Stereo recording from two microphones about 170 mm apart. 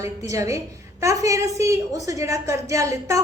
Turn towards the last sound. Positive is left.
turn(degrees=-20)  # may be behind; listen again after turning